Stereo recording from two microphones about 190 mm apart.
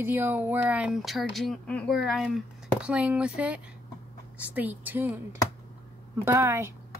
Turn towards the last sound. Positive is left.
turn(degrees=-15)  # may be behind; listen again after turning